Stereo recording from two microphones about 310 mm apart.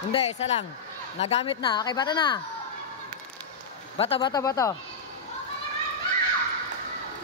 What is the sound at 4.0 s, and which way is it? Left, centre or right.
Speech, centre.